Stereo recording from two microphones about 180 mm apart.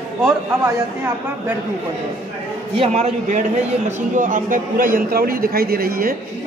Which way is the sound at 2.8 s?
35° right (ahead or behind).